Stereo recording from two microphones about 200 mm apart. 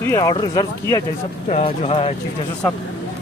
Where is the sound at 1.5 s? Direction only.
30° left (ahead or behind).